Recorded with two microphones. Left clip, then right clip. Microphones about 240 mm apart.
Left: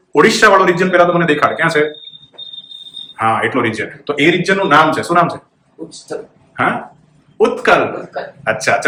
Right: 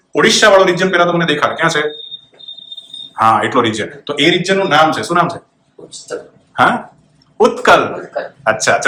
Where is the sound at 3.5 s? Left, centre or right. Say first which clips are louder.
Right 3 dB; centre.